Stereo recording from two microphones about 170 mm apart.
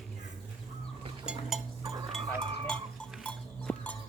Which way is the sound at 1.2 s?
5° right (ahead or behind).